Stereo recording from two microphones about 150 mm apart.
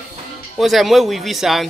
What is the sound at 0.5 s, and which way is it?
Speech, centre (ahead or behind).